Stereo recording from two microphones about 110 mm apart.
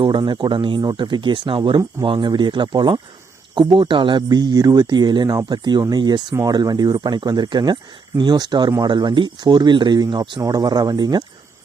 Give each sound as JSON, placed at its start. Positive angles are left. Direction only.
{"t": 0.0, "sound": "speech", "side_deg": -45}